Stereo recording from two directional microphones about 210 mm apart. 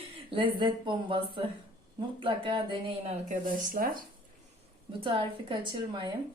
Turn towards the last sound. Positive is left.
turn(degrees=-20)  # may be behind; listen again after turning